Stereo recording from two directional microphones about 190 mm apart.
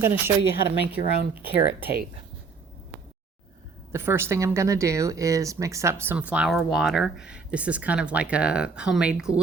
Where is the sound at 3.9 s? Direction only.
15° right (ahead or behind).